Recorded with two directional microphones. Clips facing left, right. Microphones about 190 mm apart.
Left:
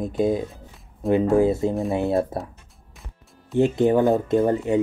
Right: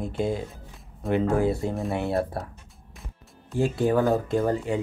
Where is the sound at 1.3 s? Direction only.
20° left (ahead or behind).